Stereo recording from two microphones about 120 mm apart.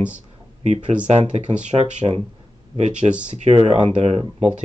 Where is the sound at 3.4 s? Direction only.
70° right (ahead or behind).